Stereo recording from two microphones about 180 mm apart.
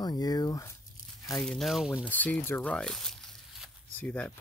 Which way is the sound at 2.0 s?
10° left (ahead or behind).